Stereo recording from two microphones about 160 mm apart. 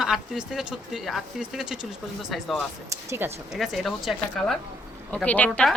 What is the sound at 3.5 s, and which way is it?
Speech, centre (ahead or behind).